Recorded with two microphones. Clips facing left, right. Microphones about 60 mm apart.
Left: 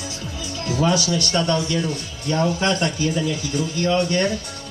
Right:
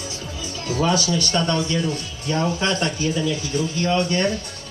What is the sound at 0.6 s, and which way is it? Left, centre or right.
Speech, right.